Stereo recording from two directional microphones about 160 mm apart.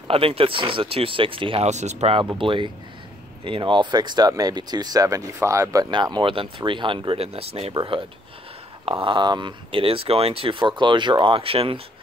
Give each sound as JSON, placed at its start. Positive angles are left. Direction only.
{"t": 0.1, "sound": "speech", "side_deg": -35}
{"t": 1.7, "sound": "speech", "side_deg": -45}